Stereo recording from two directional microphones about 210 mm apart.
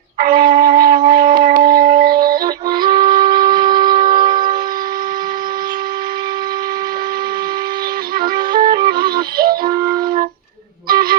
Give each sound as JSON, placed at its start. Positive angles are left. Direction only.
{"t": 0.2, "sound": "wind instrument", "side_deg": -40}
{"t": 2.6, "sound": "music", "side_deg": -20}
{"t": 3.1, "sound": "shofar", "side_deg": -20}
{"t": 3.9, "sound": "shofar", "side_deg": -40}
{"t": 8.2, "sound": "music", "side_deg": -45}
{"t": 10.8, "sound": "a sound", "side_deg": -45}